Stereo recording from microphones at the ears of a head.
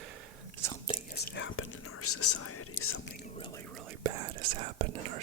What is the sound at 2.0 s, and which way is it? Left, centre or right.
Speech, left.